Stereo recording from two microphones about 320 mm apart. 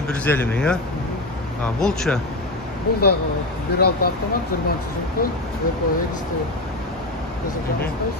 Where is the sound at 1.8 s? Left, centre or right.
Centre.